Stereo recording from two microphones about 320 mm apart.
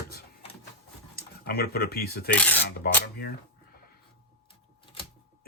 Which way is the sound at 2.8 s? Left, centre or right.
Left.